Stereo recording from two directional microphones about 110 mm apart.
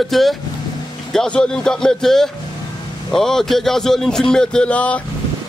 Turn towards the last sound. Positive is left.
turn(degrees=10)  # may be behind; listen again after turning